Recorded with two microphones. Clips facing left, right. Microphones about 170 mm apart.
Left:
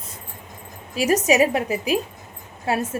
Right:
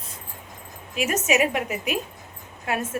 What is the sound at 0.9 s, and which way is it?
A woman's voice, 35° left (ahead or behind).